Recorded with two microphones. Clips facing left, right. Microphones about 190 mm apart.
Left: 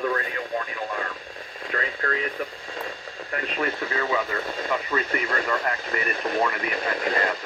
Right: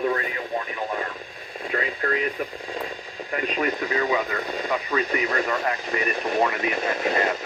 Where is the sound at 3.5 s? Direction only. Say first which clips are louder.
Right 2 dB; 15° right (ahead or behind).